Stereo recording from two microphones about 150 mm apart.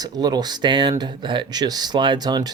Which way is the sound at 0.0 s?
25° right (ahead or behind).